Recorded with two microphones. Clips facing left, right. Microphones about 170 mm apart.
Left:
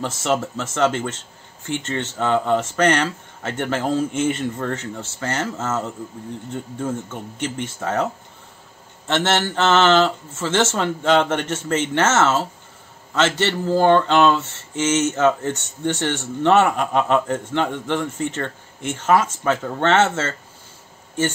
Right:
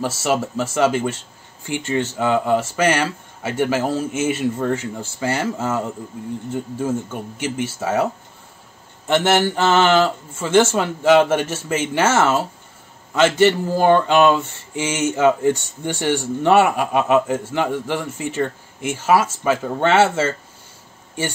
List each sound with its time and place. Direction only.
0.0 s speech: 10° right (ahead or behind)